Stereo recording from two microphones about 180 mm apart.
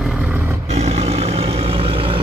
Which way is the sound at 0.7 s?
35° right (ahead or behind).